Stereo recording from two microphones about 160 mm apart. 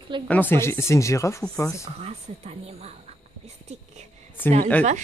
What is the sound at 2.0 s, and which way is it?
Speech, 40° right (ahead or behind).